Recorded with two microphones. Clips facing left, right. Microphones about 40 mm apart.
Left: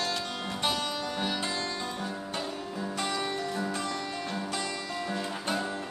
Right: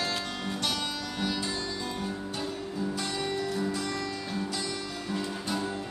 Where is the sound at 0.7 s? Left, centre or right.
Left.